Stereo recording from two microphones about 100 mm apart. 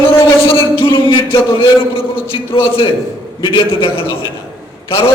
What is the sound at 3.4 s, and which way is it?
Speech, 55° left (ahead or behind).